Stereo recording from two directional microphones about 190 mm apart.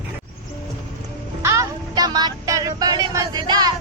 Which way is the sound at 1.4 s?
15° right (ahead or behind).